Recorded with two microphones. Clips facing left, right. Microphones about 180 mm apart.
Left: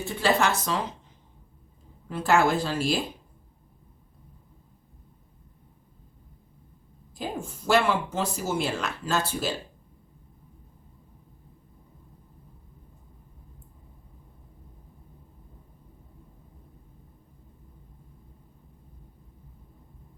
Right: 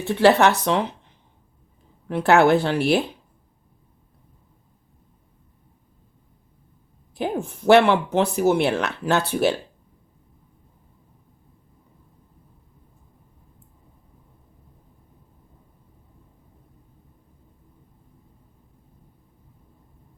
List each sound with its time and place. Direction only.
0.0 s speech: 65° right (ahead or behind)
2.0 s speech: 65° right (ahead or behind)
7.2 s speech: 65° right (ahead or behind)